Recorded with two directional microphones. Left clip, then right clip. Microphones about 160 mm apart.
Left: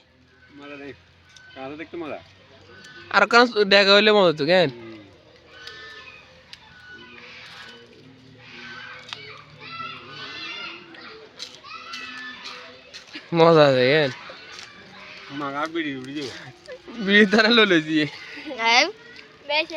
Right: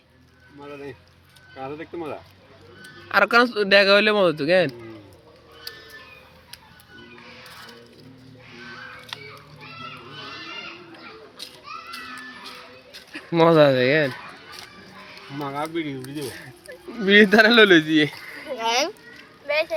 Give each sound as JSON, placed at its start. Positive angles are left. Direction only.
{"t": 0.6, "sound": "speech", "side_deg": 10}
{"t": 3.1, "sound": "speech", "side_deg": 25}
{"t": 5.7, "sound": "a sound", "side_deg": -70}
{"t": 13.3, "sound": "speech", "side_deg": 25}
{"t": 15.4, "sound": "speech", "side_deg": 15}
{"t": 16.9, "sound": "speech", "side_deg": 15}
{"t": 18.5, "sound": "a sound", "side_deg": 25}